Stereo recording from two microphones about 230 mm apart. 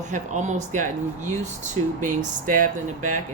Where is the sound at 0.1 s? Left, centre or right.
Right.